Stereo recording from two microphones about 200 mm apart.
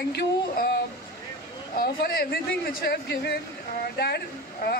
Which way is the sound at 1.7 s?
50° left (ahead or behind).